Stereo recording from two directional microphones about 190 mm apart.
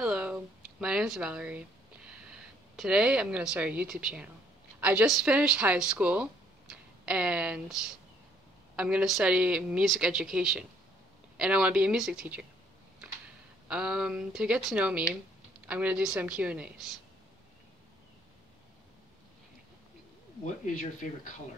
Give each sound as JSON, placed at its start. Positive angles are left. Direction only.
{"t": 0.0, "sound": "a sound", "side_deg": -5}
{"t": 2.7, "sound": "speech", "side_deg": -5}
{"t": 13.7, "sound": "speech", "side_deg": -5}
{"t": 20.6, "sound": "speech", "side_deg": 45}